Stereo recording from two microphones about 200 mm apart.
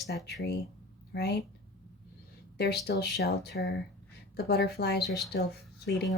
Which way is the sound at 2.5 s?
55° left (ahead or behind).